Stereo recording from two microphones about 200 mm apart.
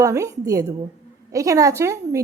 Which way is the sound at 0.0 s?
15° right (ahead or behind).